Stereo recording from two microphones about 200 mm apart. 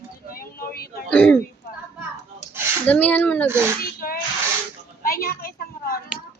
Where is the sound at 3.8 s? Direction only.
45° left (ahead or behind).